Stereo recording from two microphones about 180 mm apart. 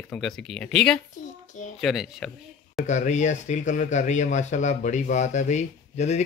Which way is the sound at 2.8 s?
40° left (ahead or behind).